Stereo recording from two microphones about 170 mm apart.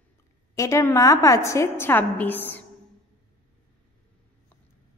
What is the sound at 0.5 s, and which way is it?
A woman's voice, 20° left (ahead or behind).